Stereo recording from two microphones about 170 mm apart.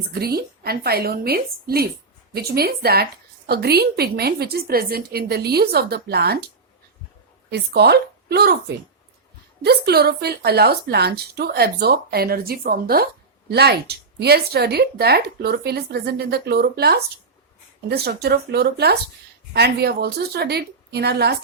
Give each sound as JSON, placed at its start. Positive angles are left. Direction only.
{"t": 0.1, "sound": "a woman's voice", "side_deg": -65}
{"t": 7.5, "sound": "speech", "side_deg": -75}
{"t": 9.6, "sound": "a woman's voice", "side_deg": -70}